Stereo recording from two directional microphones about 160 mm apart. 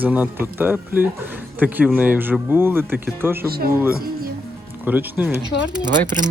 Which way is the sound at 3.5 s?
70° right (ahead or behind).